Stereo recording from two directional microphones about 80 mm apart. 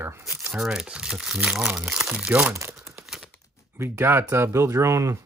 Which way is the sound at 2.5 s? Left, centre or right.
Right.